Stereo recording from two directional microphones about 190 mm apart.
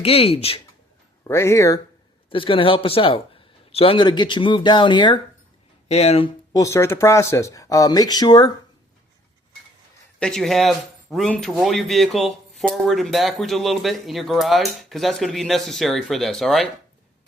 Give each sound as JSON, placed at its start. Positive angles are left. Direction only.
{"t": 0.0, "sound": "speech", "side_deg": 30}
{"t": 1.3, "sound": "speech", "side_deg": 15}
{"t": 2.3, "sound": "a man's voice", "side_deg": 25}
{"t": 5.9, "sound": "speech", "side_deg": 35}
{"t": 6.5, "sound": "speech", "side_deg": 15}
{"t": 10.2, "sound": "speech", "side_deg": 5}